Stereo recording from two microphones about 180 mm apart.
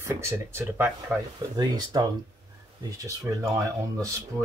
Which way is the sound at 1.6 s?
25° right (ahead or behind).